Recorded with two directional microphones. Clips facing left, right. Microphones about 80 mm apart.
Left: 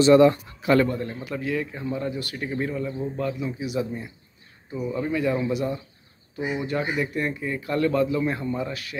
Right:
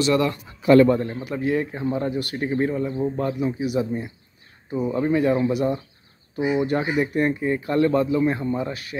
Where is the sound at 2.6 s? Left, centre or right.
Right.